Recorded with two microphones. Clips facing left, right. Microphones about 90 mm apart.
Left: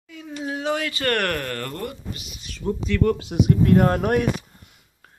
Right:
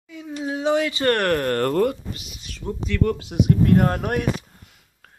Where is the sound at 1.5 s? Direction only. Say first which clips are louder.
Right 9 dB; 50° right (ahead or behind).